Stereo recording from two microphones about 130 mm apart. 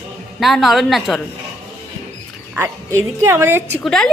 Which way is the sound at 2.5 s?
20° right (ahead or behind).